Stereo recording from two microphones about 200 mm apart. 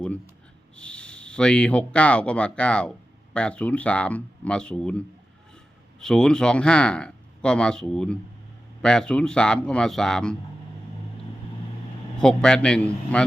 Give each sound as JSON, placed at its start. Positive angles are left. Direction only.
{"t": 0.8, "sound": "speech", "side_deg": 5}
{"t": 12.1, "sound": "speech", "side_deg": 5}